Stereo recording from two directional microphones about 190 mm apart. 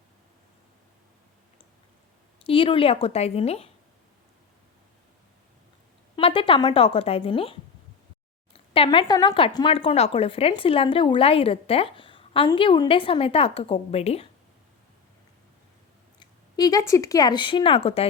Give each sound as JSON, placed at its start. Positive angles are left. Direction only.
{"t": 2.4, "sound": "a woman's voice", "side_deg": 30}
{"t": 6.1, "sound": "a woman's voice", "side_deg": 25}
{"t": 8.5, "sound": "speech", "side_deg": 30}
{"t": 16.2, "sound": "speech", "side_deg": 20}